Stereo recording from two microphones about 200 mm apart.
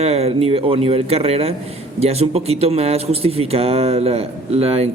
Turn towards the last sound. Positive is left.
turn(degrees=-30)  # may be behind; listen again after turning